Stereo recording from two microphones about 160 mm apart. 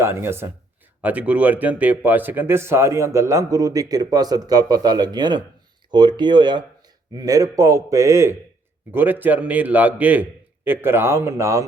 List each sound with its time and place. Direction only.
0.0 s a man's voice: 15° right (ahead or behind)